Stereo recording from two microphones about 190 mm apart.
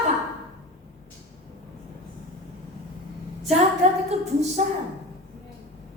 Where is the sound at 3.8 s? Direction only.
35° right (ahead or behind).